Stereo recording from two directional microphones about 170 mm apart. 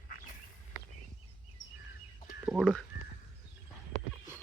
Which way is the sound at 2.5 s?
5° right (ahead or behind).